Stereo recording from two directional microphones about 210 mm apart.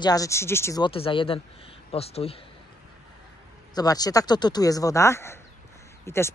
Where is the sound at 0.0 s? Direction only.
15° left (ahead or behind).